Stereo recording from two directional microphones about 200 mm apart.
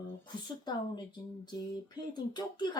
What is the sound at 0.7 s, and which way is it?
Speech, 20° left (ahead or behind).